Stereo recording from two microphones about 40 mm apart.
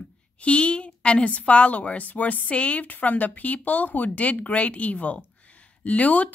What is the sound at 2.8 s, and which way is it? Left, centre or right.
Speech, left.